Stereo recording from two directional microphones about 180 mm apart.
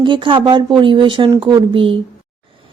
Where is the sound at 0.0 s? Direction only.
25° right (ahead or behind).